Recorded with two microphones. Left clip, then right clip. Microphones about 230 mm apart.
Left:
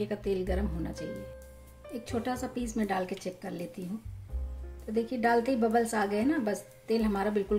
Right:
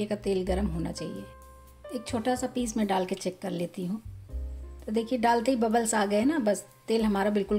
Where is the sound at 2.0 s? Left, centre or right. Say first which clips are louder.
Right 5 dB; right.